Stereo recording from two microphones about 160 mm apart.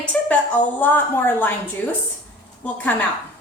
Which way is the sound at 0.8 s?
10° left (ahead or behind).